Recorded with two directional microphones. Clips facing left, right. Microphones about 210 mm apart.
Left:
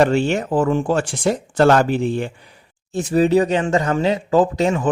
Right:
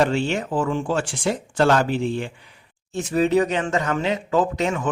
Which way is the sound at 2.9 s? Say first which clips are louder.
Left 4 dB; 35° left (ahead or behind).